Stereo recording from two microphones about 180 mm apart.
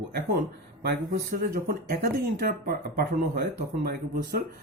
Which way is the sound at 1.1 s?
55° right (ahead or behind).